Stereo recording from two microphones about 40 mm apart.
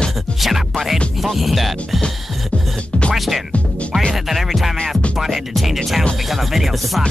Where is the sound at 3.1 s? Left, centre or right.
Centre.